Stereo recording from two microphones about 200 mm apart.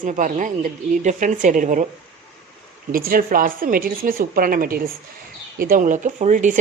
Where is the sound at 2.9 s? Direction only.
45° right (ahead or behind).